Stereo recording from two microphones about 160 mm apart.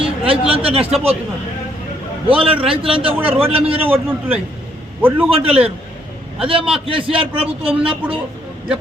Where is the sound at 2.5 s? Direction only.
10° right (ahead or behind).